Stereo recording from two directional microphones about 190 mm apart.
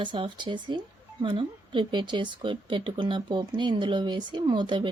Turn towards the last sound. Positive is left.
turn(degrees=-25)  # may be behind; listen again after turning